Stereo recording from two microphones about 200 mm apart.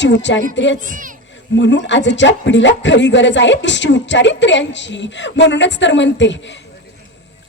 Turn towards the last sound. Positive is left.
turn(degrees=65)  # may be behind; listen again after turning